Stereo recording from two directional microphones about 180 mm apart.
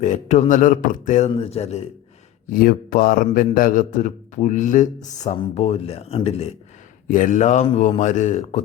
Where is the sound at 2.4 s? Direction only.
50° left (ahead or behind); by 6.5 s 35° left (ahead or behind).